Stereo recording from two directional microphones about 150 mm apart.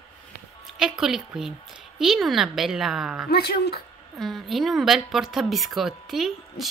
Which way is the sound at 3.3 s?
90° left.